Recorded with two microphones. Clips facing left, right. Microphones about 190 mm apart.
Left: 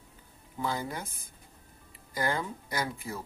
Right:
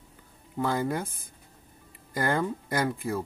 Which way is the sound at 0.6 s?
55° right (ahead or behind).